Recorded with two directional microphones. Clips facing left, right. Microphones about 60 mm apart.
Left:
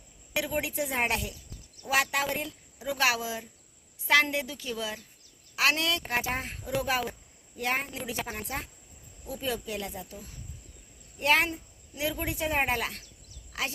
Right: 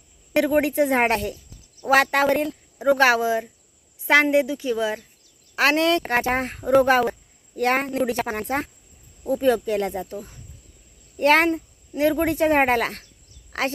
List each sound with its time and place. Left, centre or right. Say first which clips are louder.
0.3 s speech: right 12 dB; right
6.0 s a woman's voice: right 9 dB; right